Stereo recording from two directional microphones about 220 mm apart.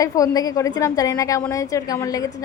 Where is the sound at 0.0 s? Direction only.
15° left (ahead or behind).